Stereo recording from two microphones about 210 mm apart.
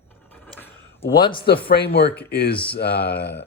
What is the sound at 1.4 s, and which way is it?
Speech, 45° left (ahead or behind).